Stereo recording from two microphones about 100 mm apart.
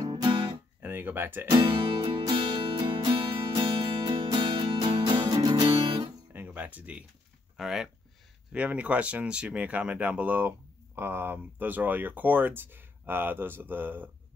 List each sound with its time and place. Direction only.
0.0 s guitar: 45° right (ahead or behind)
0.8 s speech: 20° right (ahead or behind)
2.0 s music: 55° right (ahead or behind)
6.3 s a sound: 15° right (ahead or behind)
7.5 s speech: 5° right (ahead or behind)